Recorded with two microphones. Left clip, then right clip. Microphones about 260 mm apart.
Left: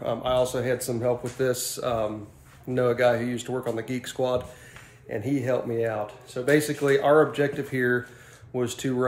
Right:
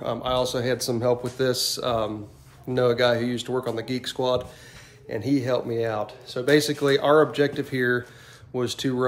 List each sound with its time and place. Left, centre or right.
0.0 s speech: centre